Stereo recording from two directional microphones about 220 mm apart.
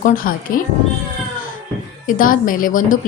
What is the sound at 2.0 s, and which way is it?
Speech, 40° left (ahead or behind).